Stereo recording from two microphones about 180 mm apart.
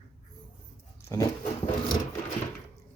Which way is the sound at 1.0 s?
20° left (ahead or behind).